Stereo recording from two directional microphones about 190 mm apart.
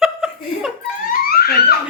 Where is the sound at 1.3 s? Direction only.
55° left (ahead or behind).